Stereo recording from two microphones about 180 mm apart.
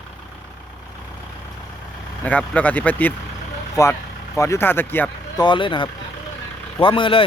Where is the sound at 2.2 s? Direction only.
10° left (ahead or behind).